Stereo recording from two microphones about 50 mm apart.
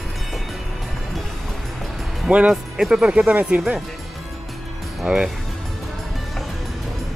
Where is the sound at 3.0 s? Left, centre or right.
Right.